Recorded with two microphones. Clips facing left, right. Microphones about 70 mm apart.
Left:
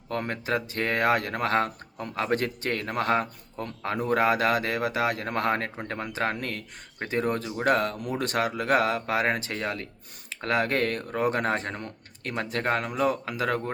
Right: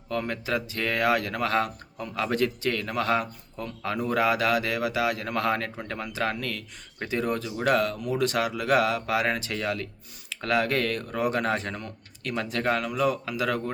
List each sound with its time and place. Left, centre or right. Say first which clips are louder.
0.1 s speech: even; left